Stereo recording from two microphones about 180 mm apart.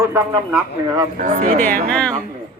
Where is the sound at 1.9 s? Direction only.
5° left (ahead or behind).